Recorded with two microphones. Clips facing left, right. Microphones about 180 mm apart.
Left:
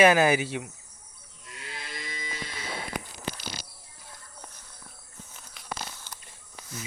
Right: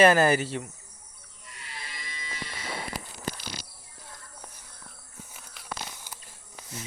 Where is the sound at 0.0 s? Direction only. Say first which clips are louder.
Even; 5° left (ahead or behind).